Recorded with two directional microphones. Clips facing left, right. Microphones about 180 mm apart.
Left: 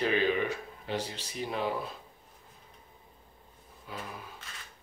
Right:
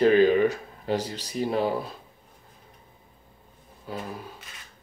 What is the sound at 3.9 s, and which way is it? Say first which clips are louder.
Speech: right 7 dB; 35° right (ahead or behind).